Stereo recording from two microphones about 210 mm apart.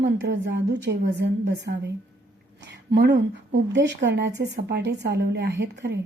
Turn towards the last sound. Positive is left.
turn(degrees=-55)  # may be behind; listen again after turning